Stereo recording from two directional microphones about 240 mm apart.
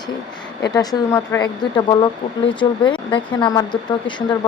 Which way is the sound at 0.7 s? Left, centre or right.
Centre.